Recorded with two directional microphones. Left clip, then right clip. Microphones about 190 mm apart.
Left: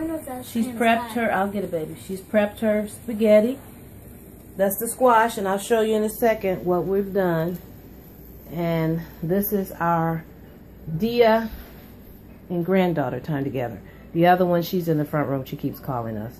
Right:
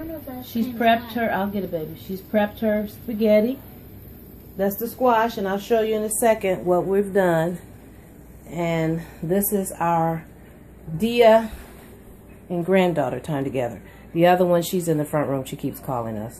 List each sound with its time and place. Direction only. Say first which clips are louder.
0.5 s speech: right 2 dB; 10° right (ahead or behind)
4.6 s a woman's voice: left 2 dB; 5° right (ahead or behind)
8.5 s speech: right 1 dB; 10° right (ahead or behind)
12.4 s speech: right 2 dB; 15° right (ahead or behind)